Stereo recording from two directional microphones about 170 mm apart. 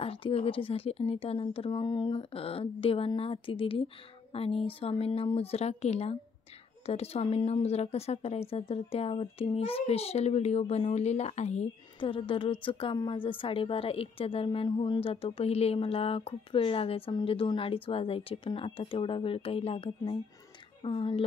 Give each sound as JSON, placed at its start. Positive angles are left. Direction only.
{"t": 0.0, "sound": "speech", "side_deg": 35}